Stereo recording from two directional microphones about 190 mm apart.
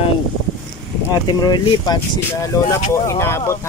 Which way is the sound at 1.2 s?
20° left (ahead or behind).